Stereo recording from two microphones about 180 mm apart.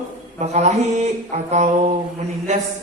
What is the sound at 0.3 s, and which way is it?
Mantra, 40° right (ahead or behind).